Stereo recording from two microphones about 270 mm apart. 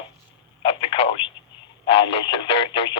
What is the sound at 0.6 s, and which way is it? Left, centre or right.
Telephone, centre.